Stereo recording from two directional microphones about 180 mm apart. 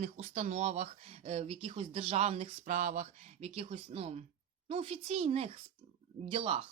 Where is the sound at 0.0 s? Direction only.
40° right (ahead or behind).